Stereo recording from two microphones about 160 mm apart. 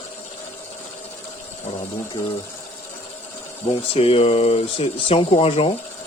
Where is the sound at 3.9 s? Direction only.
35° left (ahead or behind).